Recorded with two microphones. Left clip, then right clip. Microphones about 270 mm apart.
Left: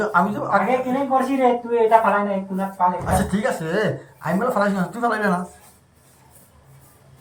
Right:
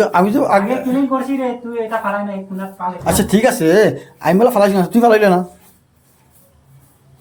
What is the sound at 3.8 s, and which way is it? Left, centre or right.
Speech, right.